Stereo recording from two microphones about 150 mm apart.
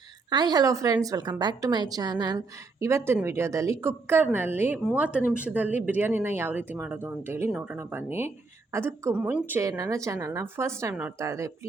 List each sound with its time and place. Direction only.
0.3 s a woman's voice: 30° right (ahead or behind)